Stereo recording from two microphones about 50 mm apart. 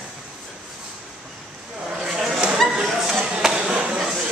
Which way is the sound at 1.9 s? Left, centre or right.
Centre.